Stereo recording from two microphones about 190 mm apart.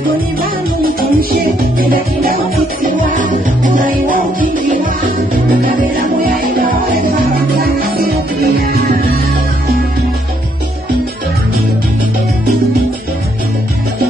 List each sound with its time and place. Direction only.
0.4 s music: 50° right (ahead or behind)